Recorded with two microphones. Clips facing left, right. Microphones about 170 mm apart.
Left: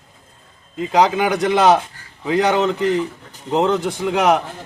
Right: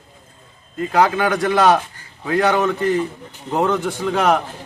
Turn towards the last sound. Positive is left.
turn(degrees=10)  # may be behind; listen again after turning